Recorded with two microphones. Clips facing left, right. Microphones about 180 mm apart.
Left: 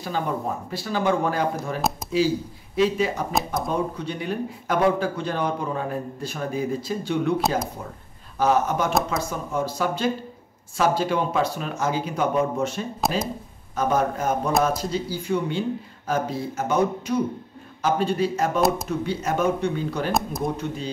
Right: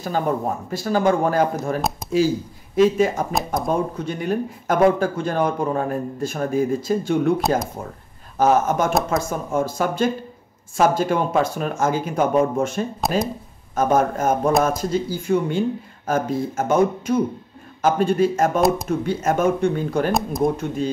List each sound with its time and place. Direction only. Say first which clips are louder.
0.7 s speech: right 5 dB; 45° right (ahead or behind)
1.8 s speech: right 1 dB; centre (ahead or behind)
2.1 s speech: right 4 dB; 45° right (ahead or behind)
20.1 s speech: right 4 dB; centre (ahead or behind)
20.5 s speech: right 5 dB; 50° right (ahead or behind)